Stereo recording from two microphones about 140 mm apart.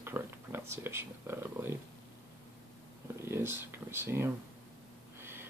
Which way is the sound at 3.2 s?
15° right (ahead or behind).